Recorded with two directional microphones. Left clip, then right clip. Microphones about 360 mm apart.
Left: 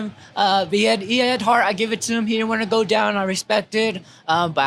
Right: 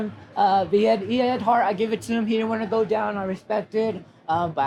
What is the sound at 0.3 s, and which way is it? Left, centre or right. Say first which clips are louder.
Speech: left 1 dB; left.